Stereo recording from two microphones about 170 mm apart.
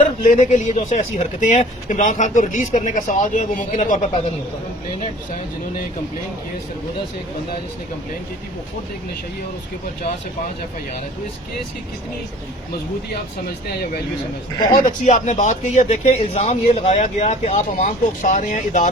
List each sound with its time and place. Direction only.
0.3 s speech: 45° left (ahead or behind)
14.8 s speech: 45° left (ahead or behind)